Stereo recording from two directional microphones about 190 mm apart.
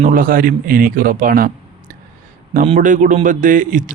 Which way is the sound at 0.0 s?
45° right (ahead or behind).